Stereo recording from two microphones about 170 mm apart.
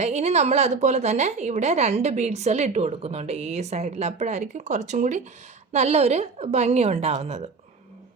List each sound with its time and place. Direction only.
0.0 s a woman's voice: 40° right (ahead or behind)